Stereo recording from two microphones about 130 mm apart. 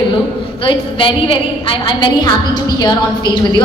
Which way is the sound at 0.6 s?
40° left (ahead or behind).